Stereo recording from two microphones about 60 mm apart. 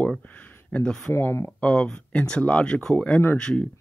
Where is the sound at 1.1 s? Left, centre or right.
Left.